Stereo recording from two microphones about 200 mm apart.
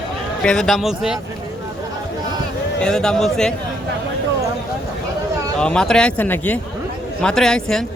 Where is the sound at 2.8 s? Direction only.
5° left (ahead or behind).